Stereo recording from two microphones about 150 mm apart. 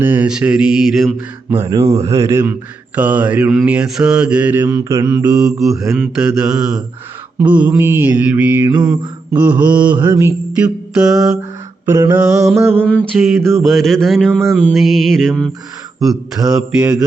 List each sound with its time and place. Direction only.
0.0 s mantra: 10° right (ahead or behind)
1.6 s speech: 25° right (ahead or behind)
4.8 s mantra: 20° right (ahead or behind)
5.0 s mantra: 5° right (ahead or behind)
7.3 s speech: 10° right (ahead or behind)
8.6 s mantra: 30° right (ahead or behind)
9.3 s speech: 10° right (ahead or behind)
10.6 s mantra: 5° right (ahead or behind)
11.9 s speech: 20° right (ahead or behind)
12.8 s mantra: 5° left (ahead or behind)